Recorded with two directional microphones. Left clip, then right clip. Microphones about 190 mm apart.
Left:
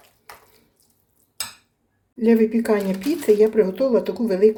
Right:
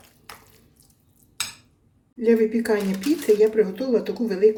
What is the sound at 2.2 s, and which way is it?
Speech, 45° left (ahead or behind).